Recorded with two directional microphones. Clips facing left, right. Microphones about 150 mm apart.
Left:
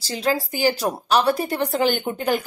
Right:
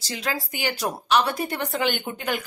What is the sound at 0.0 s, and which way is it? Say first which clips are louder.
Speech: left 7 dB; 30° left (ahead or behind).